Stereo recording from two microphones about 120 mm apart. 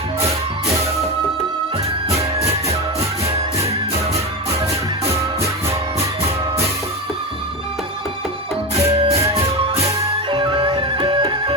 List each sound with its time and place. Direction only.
8.7 s music: 55° right (ahead or behind)
10.2 s music: 40° right (ahead or behind)